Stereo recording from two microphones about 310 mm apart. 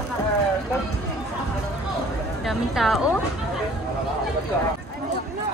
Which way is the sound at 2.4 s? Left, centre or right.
Centre.